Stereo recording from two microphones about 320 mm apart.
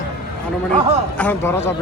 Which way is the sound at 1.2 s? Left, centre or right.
Centre.